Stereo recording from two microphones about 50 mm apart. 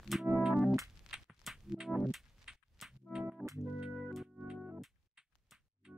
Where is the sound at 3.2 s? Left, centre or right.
Centre.